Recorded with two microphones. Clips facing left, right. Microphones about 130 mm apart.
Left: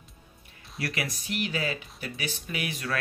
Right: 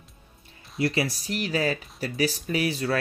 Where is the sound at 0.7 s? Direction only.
30° right (ahead or behind).